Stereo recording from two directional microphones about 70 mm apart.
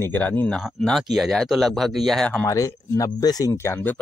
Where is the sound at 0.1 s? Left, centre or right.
Left.